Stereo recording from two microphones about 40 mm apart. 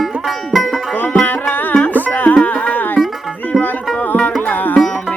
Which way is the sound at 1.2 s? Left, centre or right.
Left.